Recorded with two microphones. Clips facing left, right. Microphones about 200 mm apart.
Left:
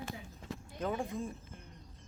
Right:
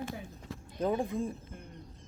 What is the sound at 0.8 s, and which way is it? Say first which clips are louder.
Speech: right 5 dB; 35° right (ahead or behind).